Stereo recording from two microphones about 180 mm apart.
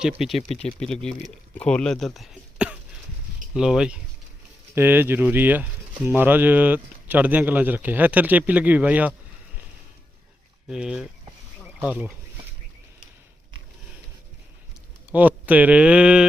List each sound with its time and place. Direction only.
0.0 s speech: 5° right (ahead or behind)
0.4 s speech: 35° left (ahead or behind)
0.8 s speech: 5° left (ahead or behind)
10.7 s speech: 5° right (ahead or behind)
11.6 s a sound: 5° right (ahead or behind)
15.1 s speech: 10° right (ahead or behind)